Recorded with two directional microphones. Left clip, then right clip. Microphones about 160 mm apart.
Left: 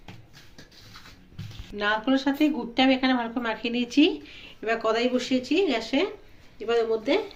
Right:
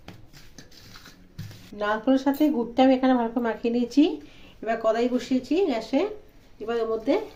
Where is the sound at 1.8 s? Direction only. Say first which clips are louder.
Right 1 dB; 50° right (ahead or behind).